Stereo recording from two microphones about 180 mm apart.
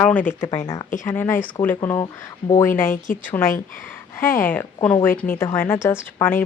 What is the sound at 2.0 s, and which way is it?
Speech, 25° left (ahead or behind).